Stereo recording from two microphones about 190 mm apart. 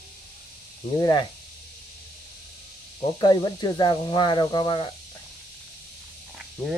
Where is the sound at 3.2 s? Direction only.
20° left (ahead or behind).